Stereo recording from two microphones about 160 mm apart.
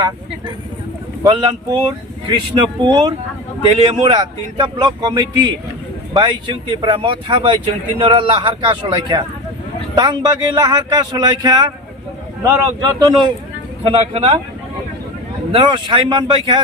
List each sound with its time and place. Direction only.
1.2 s speech: 30° right (ahead or behind)
2.8 s speech: 25° right (ahead or behind)
13.8 s speech: 40° right (ahead or behind)
15.5 s speech: 30° right (ahead or behind)